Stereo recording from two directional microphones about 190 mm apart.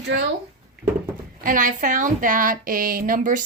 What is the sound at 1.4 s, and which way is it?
A woman's voice, 45° right (ahead or behind).